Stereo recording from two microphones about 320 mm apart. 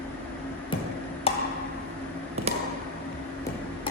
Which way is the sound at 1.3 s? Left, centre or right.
Centre.